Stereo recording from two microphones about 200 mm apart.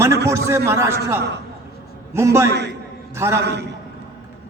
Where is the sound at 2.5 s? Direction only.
60° right (ahead or behind).